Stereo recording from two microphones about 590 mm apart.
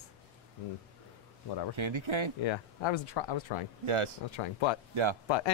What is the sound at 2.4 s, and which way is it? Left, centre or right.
Speech, left.